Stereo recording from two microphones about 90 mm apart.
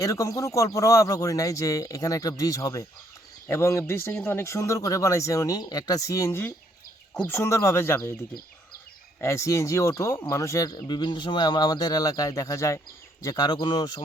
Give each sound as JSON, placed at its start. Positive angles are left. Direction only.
{"t": 0.0, "sound": "speech", "side_deg": 35}
{"t": 9.2, "sound": "speech", "side_deg": 35}